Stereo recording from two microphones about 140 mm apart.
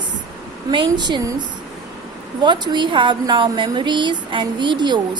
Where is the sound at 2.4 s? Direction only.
35° right (ahead or behind).